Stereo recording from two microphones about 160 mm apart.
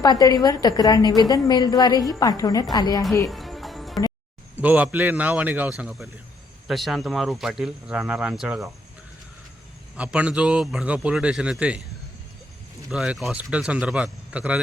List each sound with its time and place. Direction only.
0.0 s a woman's voice: 25° left (ahead or behind)
3.2 s music: centre (ahead or behind)
4.5 s a man's voice: 10° right (ahead or behind)
10.0 s a man's voice: 10° right (ahead or behind)
12.9 s a man's voice: centre (ahead or behind)